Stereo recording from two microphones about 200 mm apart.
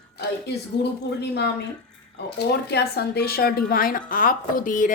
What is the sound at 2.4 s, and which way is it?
Speech, 55° left (ahead or behind).